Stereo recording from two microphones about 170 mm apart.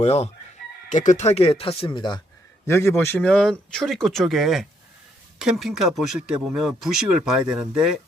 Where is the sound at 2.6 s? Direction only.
15° left (ahead or behind); by 7.9 s 5° right (ahead or behind).